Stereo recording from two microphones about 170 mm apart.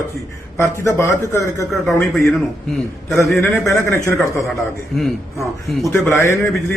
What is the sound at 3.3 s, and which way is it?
A man's voice, 15° left (ahead or behind).